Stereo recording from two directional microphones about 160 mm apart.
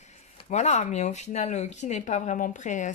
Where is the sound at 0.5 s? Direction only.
45° left (ahead or behind).